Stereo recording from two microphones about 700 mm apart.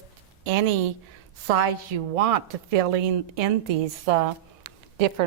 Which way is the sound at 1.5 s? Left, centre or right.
Right.